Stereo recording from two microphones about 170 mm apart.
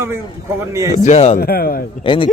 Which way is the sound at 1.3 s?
60° left (ahead or behind).